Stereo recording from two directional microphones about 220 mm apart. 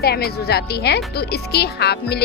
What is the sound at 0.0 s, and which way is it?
Speech, 45° left (ahead or behind).